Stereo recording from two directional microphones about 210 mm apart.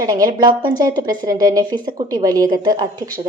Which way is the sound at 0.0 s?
20° right (ahead or behind).